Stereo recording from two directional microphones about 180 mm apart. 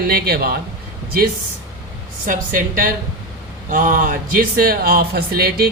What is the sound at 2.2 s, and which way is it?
A woman's voice, 50° right (ahead or behind).